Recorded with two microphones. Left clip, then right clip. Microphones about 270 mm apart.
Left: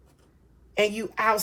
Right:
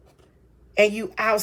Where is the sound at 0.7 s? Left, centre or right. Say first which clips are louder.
Right 5 dB; centre.